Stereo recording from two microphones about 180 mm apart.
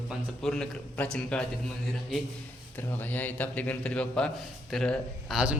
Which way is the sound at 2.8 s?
10° left (ahead or behind).